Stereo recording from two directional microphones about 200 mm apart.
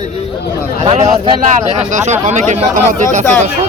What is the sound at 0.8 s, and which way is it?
A man's voice, 30° right (ahead or behind).